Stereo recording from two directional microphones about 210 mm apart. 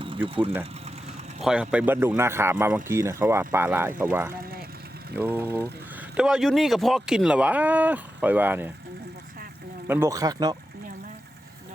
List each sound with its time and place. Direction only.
1.4 s speech: 5° right (ahead or behind)
9.8 s speech: 10° right (ahead or behind)